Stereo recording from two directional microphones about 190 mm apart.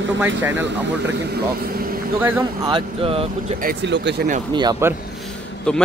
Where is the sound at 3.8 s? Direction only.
65° right (ahead or behind).